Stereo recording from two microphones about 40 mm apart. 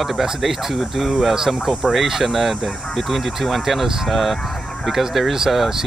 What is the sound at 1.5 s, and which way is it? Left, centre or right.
Speech, right.